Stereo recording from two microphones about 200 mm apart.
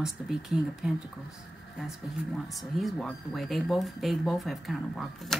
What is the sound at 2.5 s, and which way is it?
Speech, centre (ahead or behind).